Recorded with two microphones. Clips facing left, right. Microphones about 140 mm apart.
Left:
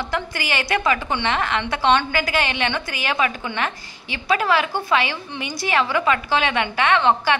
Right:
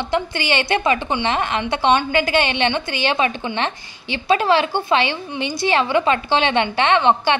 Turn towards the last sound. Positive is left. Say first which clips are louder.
# right 2 dB
turn(degrees=-20)  # may be behind; listen again after turning